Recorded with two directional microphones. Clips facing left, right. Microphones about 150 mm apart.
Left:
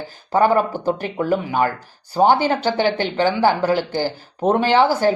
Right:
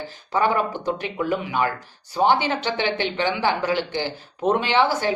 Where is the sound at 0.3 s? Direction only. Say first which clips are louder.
Left 5 dB; 40° left (ahead or behind).